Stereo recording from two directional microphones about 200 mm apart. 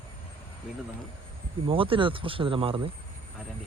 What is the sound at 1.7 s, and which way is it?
Speech, 25° right (ahead or behind).